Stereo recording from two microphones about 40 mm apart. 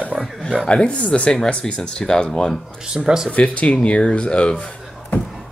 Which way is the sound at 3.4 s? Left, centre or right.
Left.